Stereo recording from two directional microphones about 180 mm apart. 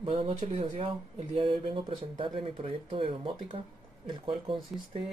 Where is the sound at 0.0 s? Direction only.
30° right (ahead or behind).